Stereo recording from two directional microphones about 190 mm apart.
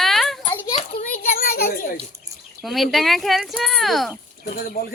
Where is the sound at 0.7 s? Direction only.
45° left (ahead or behind).